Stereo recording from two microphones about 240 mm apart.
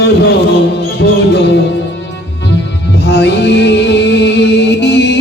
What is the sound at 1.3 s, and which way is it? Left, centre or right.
Music, left.